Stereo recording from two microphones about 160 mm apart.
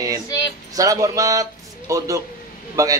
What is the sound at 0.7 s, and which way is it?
A man's voice, 20° right (ahead or behind).